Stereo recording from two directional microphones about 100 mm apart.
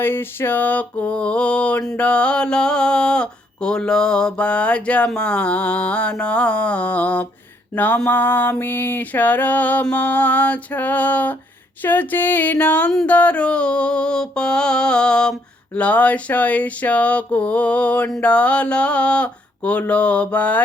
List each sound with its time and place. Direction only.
0.0 s mantra: 20° left (ahead or behind)